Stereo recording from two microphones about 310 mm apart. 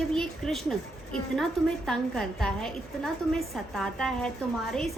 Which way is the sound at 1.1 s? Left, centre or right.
Centre.